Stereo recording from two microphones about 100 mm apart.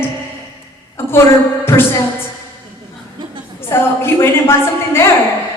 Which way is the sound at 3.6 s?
25° left (ahead or behind).